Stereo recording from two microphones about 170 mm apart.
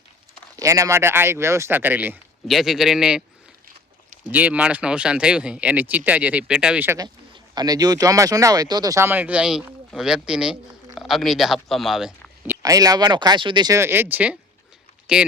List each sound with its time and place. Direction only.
0.5 s a man's voice: 20° right (ahead or behind); by 3.2 s 5° right (ahead or behind)
4.3 s speech: 10° right (ahead or behind)
12.6 s speech: 20° right (ahead or behind); by 15.3 s 5° right (ahead or behind)